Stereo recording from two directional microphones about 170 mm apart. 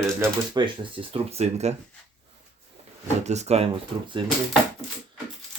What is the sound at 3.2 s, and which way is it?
Speech, 40° right (ahead or behind).